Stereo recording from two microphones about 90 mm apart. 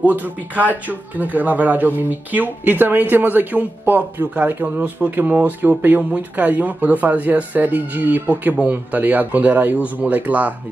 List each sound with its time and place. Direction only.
0.0 s speech: 20° right (ahead or behind)